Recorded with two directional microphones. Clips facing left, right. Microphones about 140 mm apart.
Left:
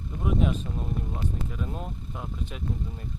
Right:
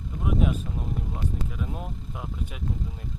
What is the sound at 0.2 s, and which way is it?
Vehicle, 5° right (ahead or behind).